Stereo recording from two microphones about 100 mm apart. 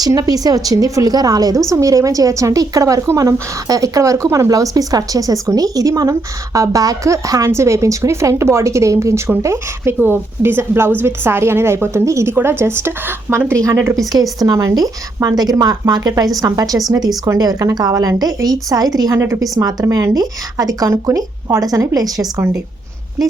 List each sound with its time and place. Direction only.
0.0 s a woman's voice: 40° right (ahead or behind)
14.1 s a woman's voice: 40° right (ahead or behind)